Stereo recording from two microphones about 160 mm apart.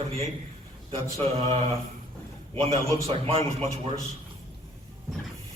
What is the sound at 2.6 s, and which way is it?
A man's voice, 40° right (ahead or behind).